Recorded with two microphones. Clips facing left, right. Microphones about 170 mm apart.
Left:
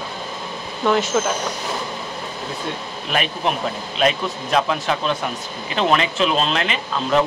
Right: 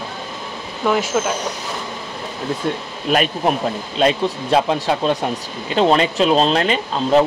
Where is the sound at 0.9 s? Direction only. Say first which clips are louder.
Even; 5° right (ahead or behind).